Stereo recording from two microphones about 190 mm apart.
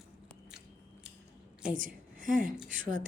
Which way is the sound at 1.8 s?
45° right (ahead or behind).